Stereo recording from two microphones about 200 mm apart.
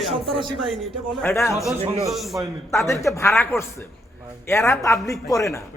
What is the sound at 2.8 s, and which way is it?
A man's voice, 15° left (ahead or behind).